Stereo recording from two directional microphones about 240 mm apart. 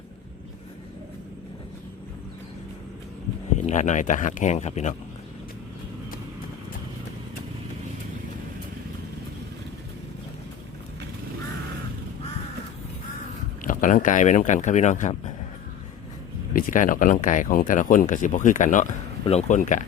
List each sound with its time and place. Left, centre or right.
3.6 s speech: left
13.7 s speech: left
16.5 s speech: left